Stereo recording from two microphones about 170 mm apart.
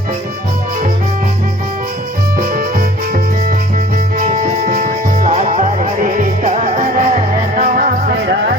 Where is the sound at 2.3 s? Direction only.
55° right (ahead or behind).